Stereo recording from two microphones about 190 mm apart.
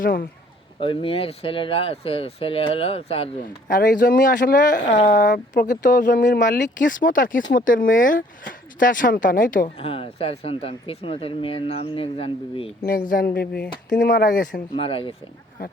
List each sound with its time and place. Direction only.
0.0 s speech: 50° left (ahead or behind)
0.8 s speech: 30° left (ahead or behind)
3.4 s speech: 45° left (ahead or behind)
9.7 s speech: 30° left (ahead or behind)
12.8 s speech: 50° left (ahead or behind)
14.8 s speech: 30° left (ahead or behind)